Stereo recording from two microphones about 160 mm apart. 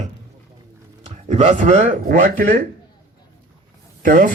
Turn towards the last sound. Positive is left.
turn(degrees=-60)  # may be behind; listen again after turning